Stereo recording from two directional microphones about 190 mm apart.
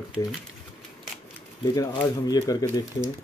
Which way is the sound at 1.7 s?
20° left (ahead or behind).